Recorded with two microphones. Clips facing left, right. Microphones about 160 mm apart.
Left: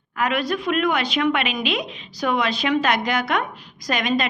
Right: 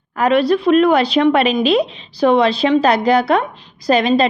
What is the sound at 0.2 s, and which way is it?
A woman's voice, 35° right (ahead or behind).